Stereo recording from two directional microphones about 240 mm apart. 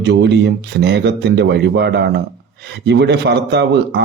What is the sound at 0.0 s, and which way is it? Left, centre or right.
Speech, right.